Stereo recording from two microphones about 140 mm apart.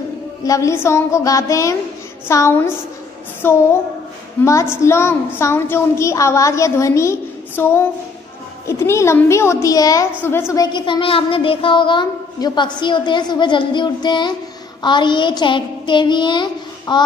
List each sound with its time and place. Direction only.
0.4 s a woman's voice: 25° left (ahead or behind)